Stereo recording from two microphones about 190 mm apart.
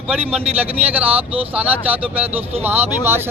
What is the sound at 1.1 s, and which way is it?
Speech, 30° right (ahead or behind).